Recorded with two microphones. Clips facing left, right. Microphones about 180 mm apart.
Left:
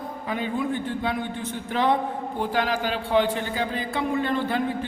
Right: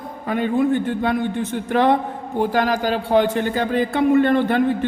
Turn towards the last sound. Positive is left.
turn(degrees=-60)  # may be behind; listen again after turning